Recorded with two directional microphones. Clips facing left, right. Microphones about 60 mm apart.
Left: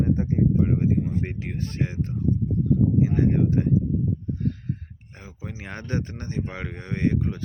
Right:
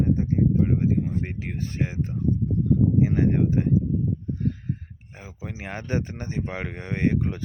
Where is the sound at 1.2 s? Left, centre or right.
Centre.